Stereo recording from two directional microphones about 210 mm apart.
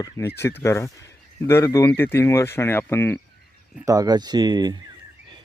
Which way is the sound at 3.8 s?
15° right (ahead or behind).